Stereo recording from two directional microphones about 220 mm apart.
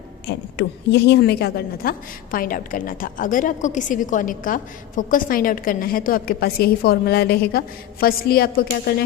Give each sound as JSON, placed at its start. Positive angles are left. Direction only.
{"t": 0.3, "sound": "a woman's voice", "side_deg": 50}